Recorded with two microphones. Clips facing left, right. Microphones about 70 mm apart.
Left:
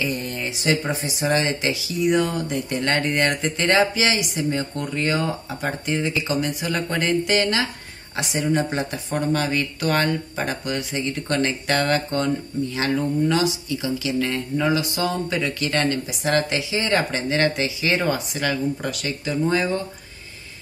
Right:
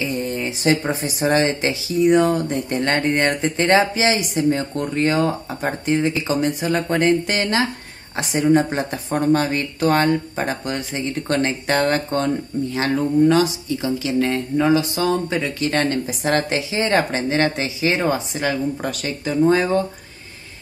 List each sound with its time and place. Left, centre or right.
0.0 s speech: right